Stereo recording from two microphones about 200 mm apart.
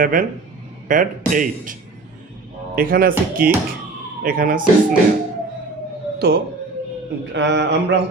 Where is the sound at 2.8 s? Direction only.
45° right (ahead or behind).